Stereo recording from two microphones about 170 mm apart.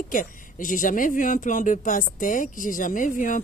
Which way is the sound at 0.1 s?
50° left (ahead or behind).